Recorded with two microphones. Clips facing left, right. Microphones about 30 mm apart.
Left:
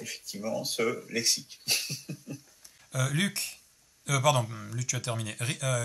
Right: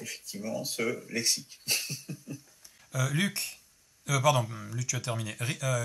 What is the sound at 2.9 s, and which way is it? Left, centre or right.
Speech, centre.